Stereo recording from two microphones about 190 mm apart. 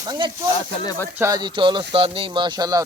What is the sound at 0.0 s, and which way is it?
Speech, 20° right (ahead or behind).